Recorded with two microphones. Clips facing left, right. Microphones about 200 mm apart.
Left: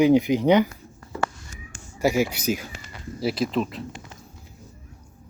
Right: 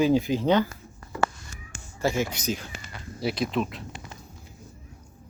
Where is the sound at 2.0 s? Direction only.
10° left (ahead or behind).